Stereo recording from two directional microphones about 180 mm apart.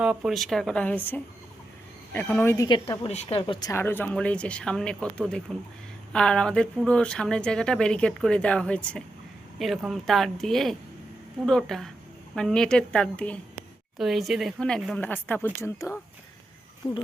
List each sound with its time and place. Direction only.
0.0 s a woman's voice: 5° right (ahead or behind); by 2.6 s 15° left (ahead or behind)
2.6 s a woman's voice: 25° left (ahead or behind)